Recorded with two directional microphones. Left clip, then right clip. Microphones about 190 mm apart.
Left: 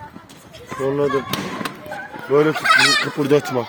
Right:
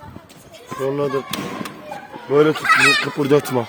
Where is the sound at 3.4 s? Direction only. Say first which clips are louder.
Right 1 dB; 35° right (ahead or behind).